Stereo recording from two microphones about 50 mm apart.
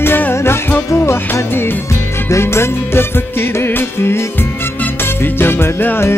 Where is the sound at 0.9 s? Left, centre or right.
Left.